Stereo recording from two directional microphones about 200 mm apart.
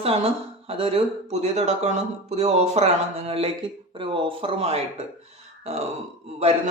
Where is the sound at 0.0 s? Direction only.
30° right (ahead or behind).